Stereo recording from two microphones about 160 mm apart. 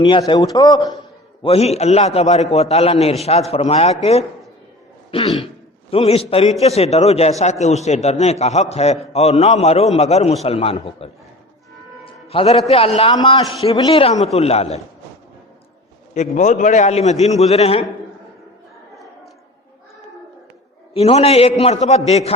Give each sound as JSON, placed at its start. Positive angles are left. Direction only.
{"t": 0.0, "sound": "a man's voice", "side_deg": 30}
{"t": 1.4, "sound": "a man's voice", "side_deg": 40}
{"t": 16.1, "sound": "a man's voice", "side_deg": 45}
{"t": 20.9, "sound": "a man's voice", "side_deg": 40}